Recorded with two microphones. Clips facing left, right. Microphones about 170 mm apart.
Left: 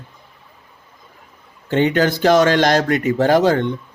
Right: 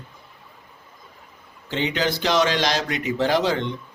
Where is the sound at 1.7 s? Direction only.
50° left (ahead or behind).